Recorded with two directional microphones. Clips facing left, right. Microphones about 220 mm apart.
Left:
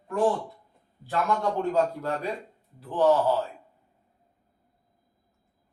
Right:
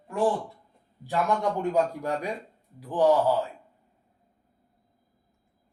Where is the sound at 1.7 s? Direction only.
15° right (ahead or behind).